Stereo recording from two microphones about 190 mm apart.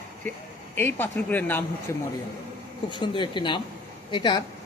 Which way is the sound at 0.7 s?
10° left (ahead or behind).